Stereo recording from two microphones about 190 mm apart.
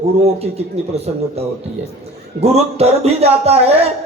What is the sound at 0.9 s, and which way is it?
Speech, 35° right (ahead or behind).